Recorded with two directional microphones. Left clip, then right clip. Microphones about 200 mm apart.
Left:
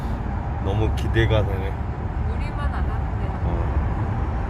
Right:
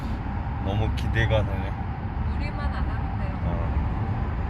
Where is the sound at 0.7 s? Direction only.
5° left (ahead or behind).